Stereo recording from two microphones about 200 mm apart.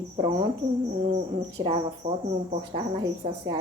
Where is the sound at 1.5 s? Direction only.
25° right (ahead or behind).